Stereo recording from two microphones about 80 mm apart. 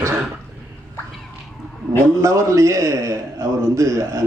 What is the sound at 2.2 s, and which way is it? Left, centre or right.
A man's voice, right.